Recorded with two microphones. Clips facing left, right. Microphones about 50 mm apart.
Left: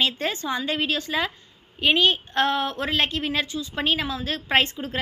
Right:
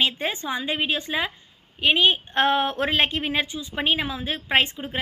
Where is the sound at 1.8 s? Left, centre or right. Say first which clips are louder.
Even; centre.